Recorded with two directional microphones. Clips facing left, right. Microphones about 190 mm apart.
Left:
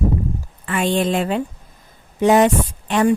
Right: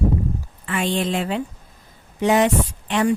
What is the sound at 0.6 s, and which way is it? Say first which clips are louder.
Speech: left 4 dB; 45° left (ahead or behind).